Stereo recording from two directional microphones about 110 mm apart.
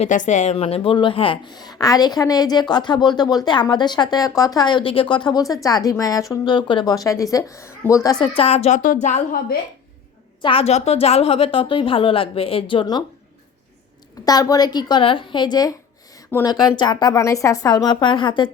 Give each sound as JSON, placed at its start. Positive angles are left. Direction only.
{"t": 0.0, "sound": "a woman's voice", "side_deg": 90}
{"t": 5.6, "sound": "a woman's voice", "side_deg": 35}
{"t": 8.4, "sound": "speech", "side_deg": 70}
{"t": 10.4, "sound": "a woman's voice", "side_deg": 60}
{"t": 14.3, "sound": "a woman's voice", "side_deg": 35}
{"t": 15.0, "sound": "a woman's voice", "side_deg": 50}
{"t": 17.2, "sound": "a woman's voice", "side_deg": 30}